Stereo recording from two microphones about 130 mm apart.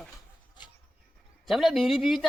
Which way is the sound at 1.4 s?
Centre (ahead or behind).